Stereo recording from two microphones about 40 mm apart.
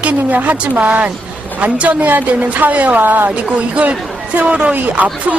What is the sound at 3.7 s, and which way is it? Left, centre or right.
Speech, right.